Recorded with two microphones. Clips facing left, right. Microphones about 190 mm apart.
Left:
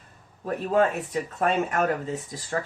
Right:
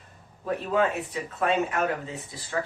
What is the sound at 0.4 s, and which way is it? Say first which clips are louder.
Speech: left 2 dB; 45° left (ahead or behind).